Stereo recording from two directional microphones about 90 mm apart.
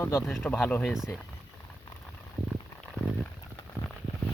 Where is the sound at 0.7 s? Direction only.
15° left (ahead or behind).